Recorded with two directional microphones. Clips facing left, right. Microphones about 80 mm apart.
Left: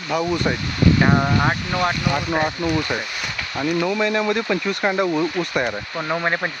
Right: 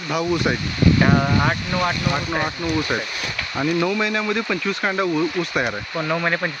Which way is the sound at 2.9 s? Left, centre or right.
Centre.